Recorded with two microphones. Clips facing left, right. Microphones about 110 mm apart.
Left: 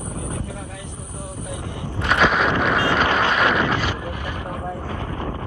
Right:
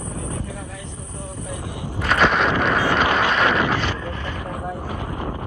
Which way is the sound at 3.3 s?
Centre (ahead or behind).